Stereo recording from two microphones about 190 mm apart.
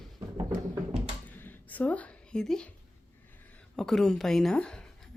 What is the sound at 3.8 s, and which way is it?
Speech, centre (ahead or behind).